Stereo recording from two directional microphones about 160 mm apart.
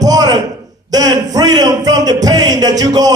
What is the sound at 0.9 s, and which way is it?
Speech, 25° right (ahead or behind).